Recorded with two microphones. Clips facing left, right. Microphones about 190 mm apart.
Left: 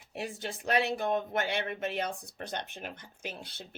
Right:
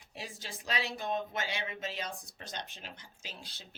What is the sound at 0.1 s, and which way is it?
Speech, 60° left (ahead or behind).